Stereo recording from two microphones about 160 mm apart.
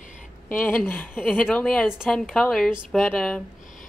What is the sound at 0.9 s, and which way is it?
A woman's voice, 10° left (ahead or behind).